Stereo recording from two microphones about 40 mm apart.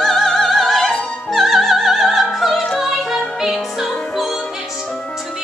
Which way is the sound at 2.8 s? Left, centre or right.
Centre.